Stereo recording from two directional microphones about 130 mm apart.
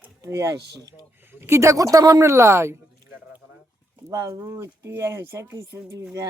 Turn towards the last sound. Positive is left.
turn(degrees=-20)  # may be behind; listen again after turning